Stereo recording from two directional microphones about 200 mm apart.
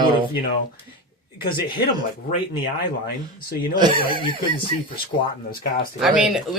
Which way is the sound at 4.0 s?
25° left (ahead or behind).